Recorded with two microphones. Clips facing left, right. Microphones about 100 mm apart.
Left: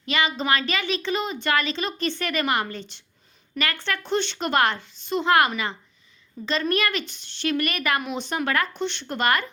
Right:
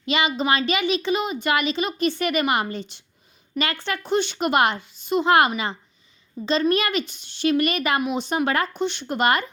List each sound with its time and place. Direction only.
0.0 s a woman's voice: 20° right (ahead or behind)